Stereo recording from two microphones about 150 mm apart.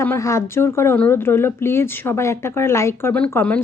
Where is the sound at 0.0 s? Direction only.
20° left (ahead or behind).